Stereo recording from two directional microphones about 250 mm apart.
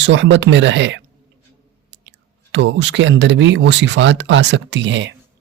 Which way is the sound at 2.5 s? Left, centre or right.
Right.